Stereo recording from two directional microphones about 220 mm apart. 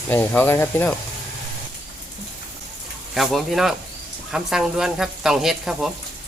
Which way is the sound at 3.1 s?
Centre (ahead or behind).